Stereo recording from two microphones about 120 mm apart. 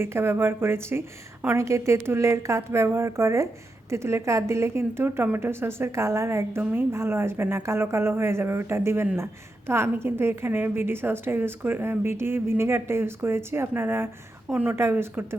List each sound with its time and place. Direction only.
0.0 s a woman's voice: 20° right (ahead or behind)